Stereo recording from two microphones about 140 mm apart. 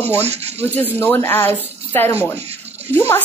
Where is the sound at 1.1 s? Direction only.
20° left (ahead or behind).